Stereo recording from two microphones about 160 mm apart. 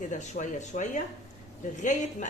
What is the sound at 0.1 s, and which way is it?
Speech, 50° left (ahead or behind).